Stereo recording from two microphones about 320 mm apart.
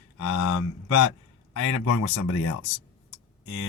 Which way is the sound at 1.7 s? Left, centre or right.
Left.